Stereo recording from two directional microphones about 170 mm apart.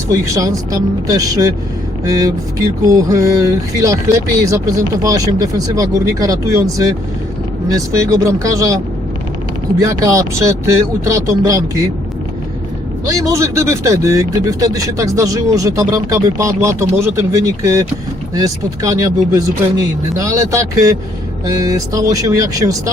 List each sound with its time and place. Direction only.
0.1 s speech: 20° right (ahead or behind)
9.8 s speech: 20° right (ahead or behind)
13.1 s speech: 20° right (ahead or behind)